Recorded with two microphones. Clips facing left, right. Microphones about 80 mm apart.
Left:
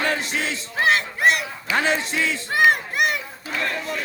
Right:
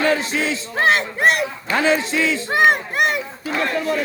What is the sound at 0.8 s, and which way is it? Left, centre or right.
Speech, right.